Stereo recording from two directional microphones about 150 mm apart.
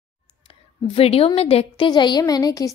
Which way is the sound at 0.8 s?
40° left (ahead or behind).